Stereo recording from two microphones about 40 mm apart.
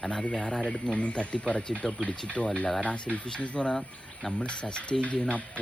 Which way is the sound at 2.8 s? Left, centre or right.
Left.